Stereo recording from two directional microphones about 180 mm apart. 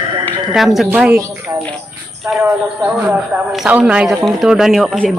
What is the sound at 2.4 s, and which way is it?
A man's voice, 5° right (ahead or behind).